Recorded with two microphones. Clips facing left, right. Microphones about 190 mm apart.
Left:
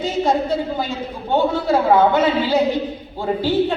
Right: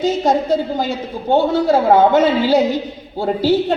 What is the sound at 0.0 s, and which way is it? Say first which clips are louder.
A woman's voice: right 3 dB; 40° right (ahead or behind).